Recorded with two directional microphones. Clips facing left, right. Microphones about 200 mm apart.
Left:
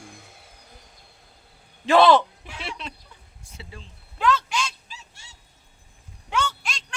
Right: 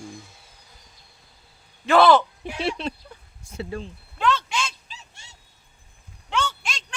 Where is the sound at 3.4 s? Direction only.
50° right (ahead or behind).